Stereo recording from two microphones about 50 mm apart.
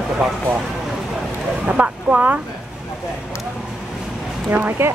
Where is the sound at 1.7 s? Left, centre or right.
Right.